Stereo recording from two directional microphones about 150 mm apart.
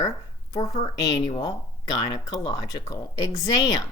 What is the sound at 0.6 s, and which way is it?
Speech, 45° left (ahead or behind).